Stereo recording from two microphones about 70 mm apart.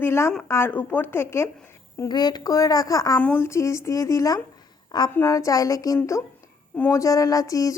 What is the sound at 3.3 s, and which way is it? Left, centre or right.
A woman's voice, left.